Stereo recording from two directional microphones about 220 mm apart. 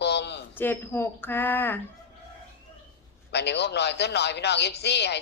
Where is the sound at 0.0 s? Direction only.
50° left (ahead or behind).